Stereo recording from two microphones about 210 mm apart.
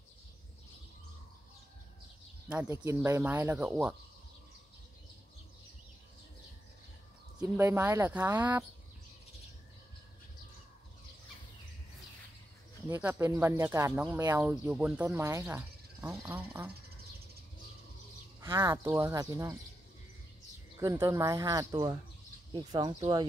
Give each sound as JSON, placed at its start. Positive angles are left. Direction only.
{"t": 2.4, "sound": "speech", "side_deg": -10}
{"t": 7.5, "sound": "speech", "side_deg": -10}
{"t": 12.8, "sound": "speech", "side_deg": -10}
{"t": 18.4, "sound": "speech", "side_deg": -10}
{"t": 20.7, "sound": "speech", "side_deg": -15}